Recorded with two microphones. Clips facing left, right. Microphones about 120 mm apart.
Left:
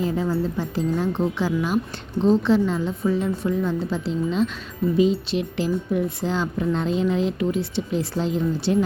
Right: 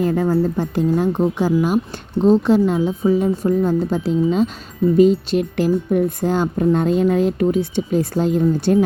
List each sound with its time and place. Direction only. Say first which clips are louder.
0.0 s speech: right 6 dB; 55° right (ahead or behind)
1.4 s speech: right 5 dB; 45° right (ahead or behind)